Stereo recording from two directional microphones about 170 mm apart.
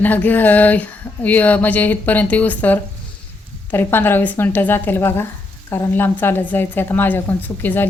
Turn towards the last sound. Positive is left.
turn(degrees=10)  # may be behind; listen again after turning